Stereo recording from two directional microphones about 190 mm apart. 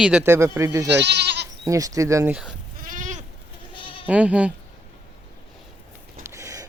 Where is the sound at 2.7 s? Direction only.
45° right (ahead or behind).